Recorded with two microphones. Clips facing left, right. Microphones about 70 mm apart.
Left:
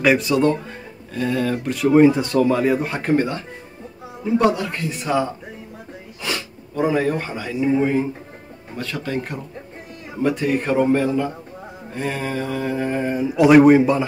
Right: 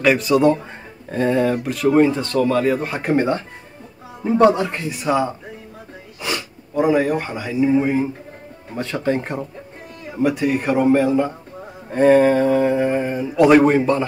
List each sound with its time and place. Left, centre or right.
0.0 s speech: centre
1.1 s mantra: right
1.6 s speech: centre
2.0 s speech: centre
3.2 s a man's voice: right
6.2 s speech: centre
8.7 s a man's voice: right
10.2 s a man's voice: centre
11.9 s mantra: right
12.7 s a man's voice: centre
13.2 s speech: centre